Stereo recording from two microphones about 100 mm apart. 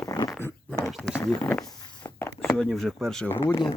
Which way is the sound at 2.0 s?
20° left (ahead or behind).